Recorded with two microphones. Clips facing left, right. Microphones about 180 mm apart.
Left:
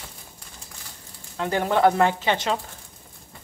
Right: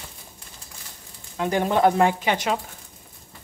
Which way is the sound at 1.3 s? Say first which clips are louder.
Right 1 dB; 15° right (ahead or behind).